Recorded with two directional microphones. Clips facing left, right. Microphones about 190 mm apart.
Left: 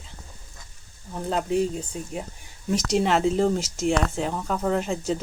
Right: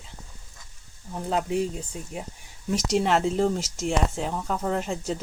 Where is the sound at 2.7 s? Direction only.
Centre (ahead or behind).